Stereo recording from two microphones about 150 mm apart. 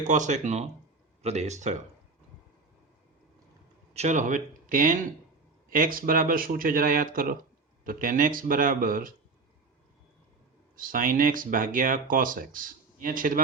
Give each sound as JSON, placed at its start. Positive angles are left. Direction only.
{"t": 0.1, "sound": "speech", "side_deg": -55}
{"t": 3.9, "sound": "speech", "side_deg": -50}
{"t": 10.8, "sound": "speech", "side_deg": -70}